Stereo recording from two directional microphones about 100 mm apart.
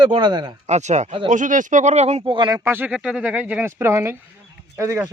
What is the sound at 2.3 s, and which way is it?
Speech, 55° right (ahead or behind).